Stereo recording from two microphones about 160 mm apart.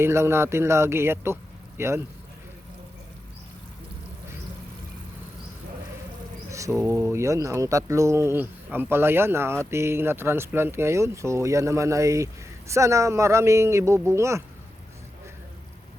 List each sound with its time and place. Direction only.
0.0 s speech: 15° right (ahead or behind)
6.5 s speech: 20° right (ahead or behind)